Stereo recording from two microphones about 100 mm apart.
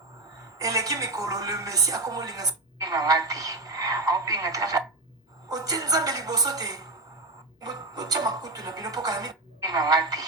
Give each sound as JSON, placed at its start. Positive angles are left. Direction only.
{"t": 0.6, "sound": "a woman's voice", "side_deg": -35}